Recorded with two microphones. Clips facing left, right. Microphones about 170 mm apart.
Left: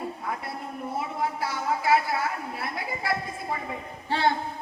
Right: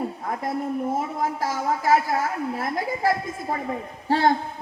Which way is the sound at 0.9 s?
45° right (ahead or behind).